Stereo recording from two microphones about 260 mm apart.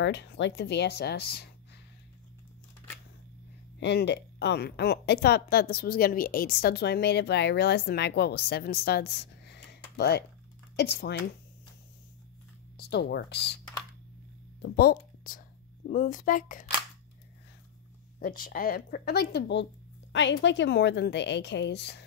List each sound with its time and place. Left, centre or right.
0.0 s a woman's voice: left
3.8 s a woman's voice: left
12.7 s speech: left
14.6 s a woman's voice: left
18.2 s a woman's voice: left